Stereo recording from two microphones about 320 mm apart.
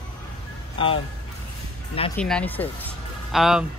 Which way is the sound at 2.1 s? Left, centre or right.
Centre.